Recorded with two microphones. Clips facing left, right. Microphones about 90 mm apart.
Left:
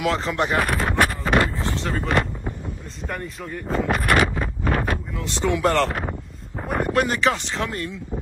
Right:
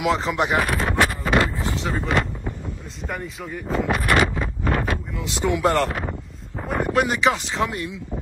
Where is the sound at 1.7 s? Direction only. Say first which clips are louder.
Even; 5° right (ahead or behind).